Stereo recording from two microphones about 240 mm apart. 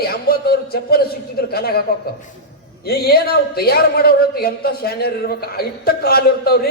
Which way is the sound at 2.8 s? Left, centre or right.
Left.